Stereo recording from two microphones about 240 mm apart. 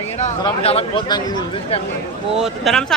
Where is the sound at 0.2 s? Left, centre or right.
Left.